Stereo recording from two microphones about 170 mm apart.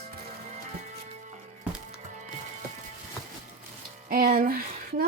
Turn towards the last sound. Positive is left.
turn(degrees=-60)  # may be behind; listen again after turning